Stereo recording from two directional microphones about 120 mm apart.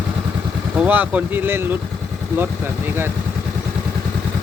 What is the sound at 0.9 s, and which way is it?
Speech, 15° right (ahead or behind).